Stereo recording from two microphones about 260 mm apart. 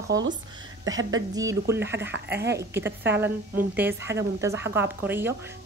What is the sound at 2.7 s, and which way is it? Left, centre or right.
Speech, centre.